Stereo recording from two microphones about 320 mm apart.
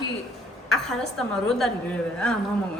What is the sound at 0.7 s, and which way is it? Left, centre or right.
A man's voice, centre.